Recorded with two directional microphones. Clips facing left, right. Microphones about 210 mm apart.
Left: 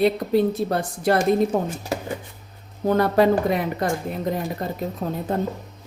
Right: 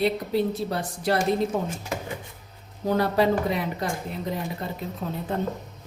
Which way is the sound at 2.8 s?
50° left (ahead or behind).